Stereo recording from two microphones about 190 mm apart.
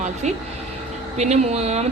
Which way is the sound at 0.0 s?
35° right (ahead or behind).